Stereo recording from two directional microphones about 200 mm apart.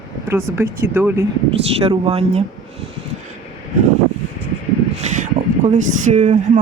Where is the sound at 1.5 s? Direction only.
30° right (ahead or behind).